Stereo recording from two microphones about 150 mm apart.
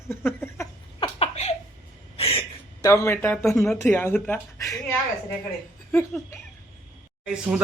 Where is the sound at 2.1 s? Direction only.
40° left (ahead or behind).